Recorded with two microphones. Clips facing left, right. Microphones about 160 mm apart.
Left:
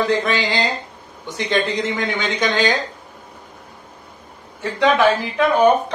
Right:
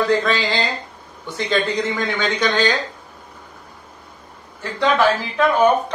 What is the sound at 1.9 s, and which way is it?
Speech, 15° left (ahead or behind).